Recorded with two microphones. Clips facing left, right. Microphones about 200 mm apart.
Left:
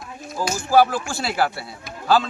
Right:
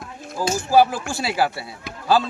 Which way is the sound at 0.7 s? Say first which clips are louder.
Even; 10° right (ahead or behind).